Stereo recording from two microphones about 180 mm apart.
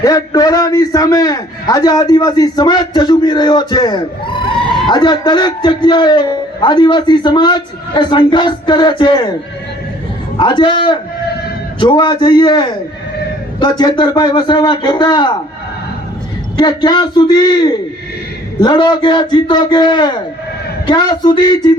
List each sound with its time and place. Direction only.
0.0 s a man's voice: 20° left (ahead or behind)
10.3 s a man's voice: 25° left (ahead or behind)
16.6 s a man's voice: 25° left (ahead or behind)